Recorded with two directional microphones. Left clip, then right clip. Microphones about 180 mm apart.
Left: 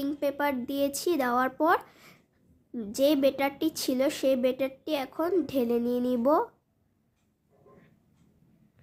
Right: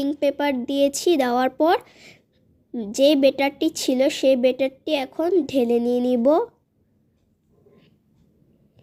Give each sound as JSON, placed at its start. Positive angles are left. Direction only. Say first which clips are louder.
{"t": 0.0, "sound": "speech", "louder": "right 7 dB", "side_deg": -25}